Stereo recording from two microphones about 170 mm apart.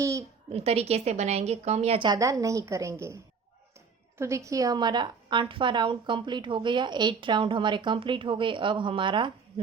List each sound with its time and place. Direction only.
0.0 s a sound: 20° right (ahead or behind)
0.5 s a woman's voice: 35° right (ahead or behind); by 3.2 s 15° right (ahead or behind)
4.2 s a woman's voice: 15° right (ahead or behind)